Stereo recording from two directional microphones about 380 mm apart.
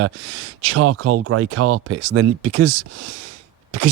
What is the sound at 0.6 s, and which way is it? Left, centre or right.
Speech, right.